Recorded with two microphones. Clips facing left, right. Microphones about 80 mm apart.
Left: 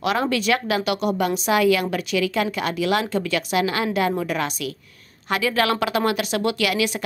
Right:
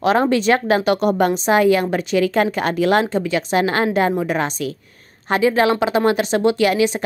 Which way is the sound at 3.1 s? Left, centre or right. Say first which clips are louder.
Right 4 dB; right.